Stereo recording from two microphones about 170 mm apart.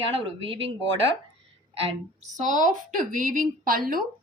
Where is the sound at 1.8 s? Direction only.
40° right (ahead or behind); by 4.1 s 60° right (ahead or behind).